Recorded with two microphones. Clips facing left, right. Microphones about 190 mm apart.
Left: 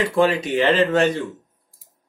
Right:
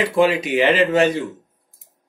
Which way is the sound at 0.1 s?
10° right (ahead or behind).